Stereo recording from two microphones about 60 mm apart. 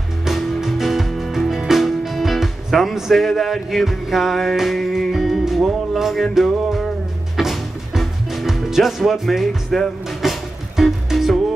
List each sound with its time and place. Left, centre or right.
0.2 s music: centre